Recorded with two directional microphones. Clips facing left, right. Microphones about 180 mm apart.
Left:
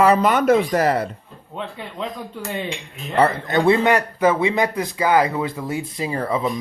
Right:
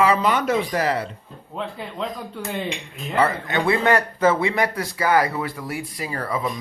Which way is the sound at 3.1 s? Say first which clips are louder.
Left 3 dB; 40° left (ahead or behind).